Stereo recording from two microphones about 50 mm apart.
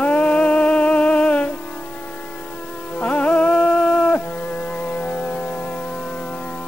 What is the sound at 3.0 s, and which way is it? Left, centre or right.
Music, left.